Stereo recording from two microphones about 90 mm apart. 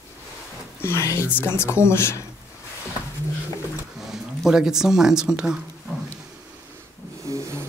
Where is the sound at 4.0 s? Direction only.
5° right (ahead or behind).